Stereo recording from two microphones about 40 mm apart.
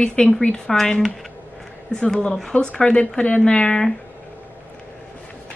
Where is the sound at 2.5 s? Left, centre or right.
Left.